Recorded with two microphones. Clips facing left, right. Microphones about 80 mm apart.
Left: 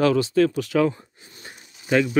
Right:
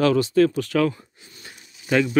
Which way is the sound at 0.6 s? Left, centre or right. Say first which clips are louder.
Left 1 dB; centre.